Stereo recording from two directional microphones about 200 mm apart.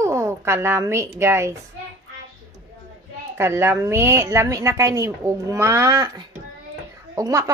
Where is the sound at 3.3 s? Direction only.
15° right (ahead or behind).